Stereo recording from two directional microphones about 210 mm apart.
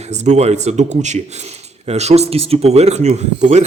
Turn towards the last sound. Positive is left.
turn(degrees=-30)  # may be behind; listen again after turning